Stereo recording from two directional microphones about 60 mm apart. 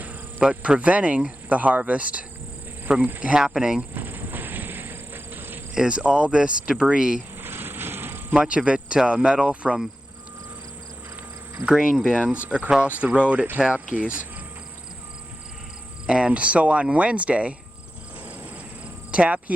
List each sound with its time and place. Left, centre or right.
0.3 s speech: centre
3.3 s speech: centre
3.9 s a sound: right
5.7 s speech: centre
7.4 s a sound: right
8.3 s speech: right
11.6 s speech: centre; by 14.2 s right
16.0 s speech: centre
19.1 s speech: right